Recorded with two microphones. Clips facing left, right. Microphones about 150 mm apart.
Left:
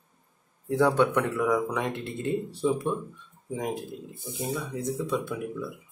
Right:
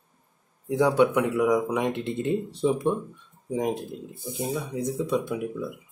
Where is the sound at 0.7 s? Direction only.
10° right (ahead or behind).